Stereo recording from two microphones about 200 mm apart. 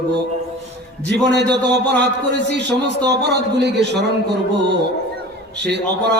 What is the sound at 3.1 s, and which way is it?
A man's voice, 55° right (ahead or behind).